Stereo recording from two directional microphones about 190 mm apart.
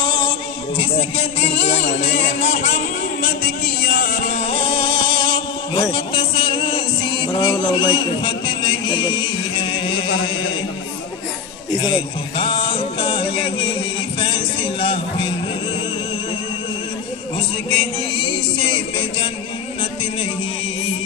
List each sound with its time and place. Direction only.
0.0 s music: 25° left (ahead or behind)
11.8 s a sound: 25° left (ahead or behind)
14.2 s speech: 25° left (ahead or behind)
18.6 s speech: 30° left (ahead or behind)